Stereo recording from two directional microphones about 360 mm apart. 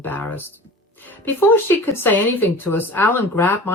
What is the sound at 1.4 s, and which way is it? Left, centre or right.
Speech, centre.